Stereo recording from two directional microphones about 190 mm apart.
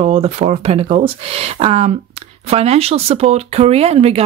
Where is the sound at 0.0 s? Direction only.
30° right (ahead or behind).